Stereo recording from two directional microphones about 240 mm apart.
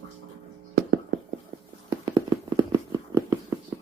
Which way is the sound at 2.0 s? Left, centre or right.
Centre.